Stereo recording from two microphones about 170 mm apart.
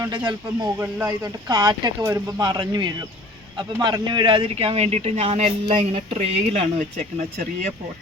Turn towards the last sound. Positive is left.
turn(degrees=-45)  # may be behind; listen again after turning